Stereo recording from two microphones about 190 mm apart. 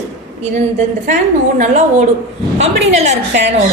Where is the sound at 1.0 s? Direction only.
40° right (ahead or behind).